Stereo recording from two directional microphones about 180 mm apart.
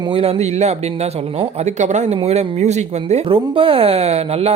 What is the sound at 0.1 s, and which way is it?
Speech, 30° right (ahead or behind).